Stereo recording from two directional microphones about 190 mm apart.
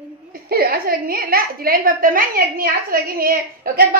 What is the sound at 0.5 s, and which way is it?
A woman's voice, 50° right (ahead or behind).